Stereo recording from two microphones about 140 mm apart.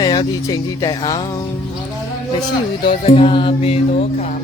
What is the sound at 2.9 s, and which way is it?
Music, 45° left (ahead or behind).